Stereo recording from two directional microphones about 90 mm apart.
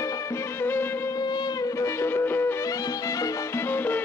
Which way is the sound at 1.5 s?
40° left (ahead or behind).